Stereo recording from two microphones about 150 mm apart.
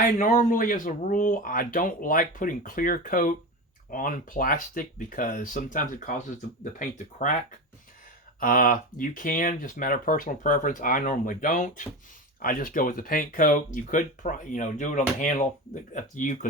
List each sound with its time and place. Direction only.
0.0 s speech: 60° left (ahead or behind)
8.4 s speech: 70° left (ahead or behind)